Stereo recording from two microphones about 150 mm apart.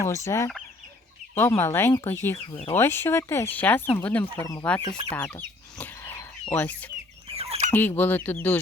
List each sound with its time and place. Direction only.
0.0 s fowl: 20° left (ahead or behind)
1.4 s speech: 15° left (ahead or behind)
5.7 s a sound: 10° left (ahead or behind)
6.5 s speech: 10° left (ahead or behind)
7.3 s fowl: 40° right (ahead or behind)
7.7 s speech: 15° left (ahead or behind)